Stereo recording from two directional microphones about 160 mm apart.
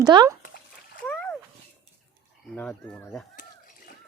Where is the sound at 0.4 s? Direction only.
60° left (ahead or behind).